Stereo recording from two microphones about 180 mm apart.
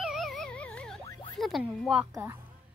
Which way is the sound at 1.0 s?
20° left (ahead or behind).